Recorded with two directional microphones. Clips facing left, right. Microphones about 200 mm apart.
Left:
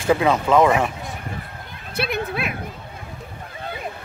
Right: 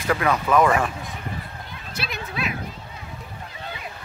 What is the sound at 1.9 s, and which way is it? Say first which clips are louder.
Horse: left 8 dB; 55° left (ahead or behind).